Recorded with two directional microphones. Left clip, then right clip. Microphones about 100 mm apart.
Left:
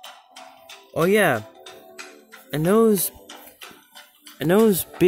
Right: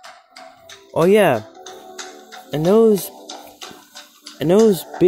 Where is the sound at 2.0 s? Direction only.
55° right (ahead or behind).